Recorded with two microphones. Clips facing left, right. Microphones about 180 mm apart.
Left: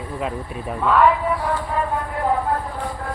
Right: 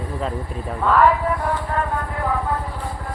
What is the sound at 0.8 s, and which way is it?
Speech, centre (ahead or behind).